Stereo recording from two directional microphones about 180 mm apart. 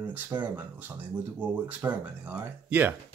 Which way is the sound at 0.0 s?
10° right (ahead or behind).